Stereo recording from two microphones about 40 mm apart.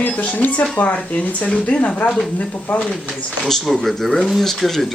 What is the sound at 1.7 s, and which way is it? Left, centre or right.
Speech, left.